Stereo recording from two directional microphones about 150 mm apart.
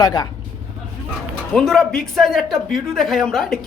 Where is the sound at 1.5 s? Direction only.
Centre (ahead or behind).